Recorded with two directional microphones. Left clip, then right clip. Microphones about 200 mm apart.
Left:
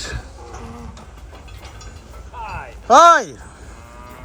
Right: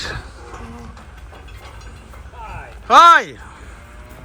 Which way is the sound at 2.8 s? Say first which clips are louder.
Right 1 dB; 20° left (ahead or behind).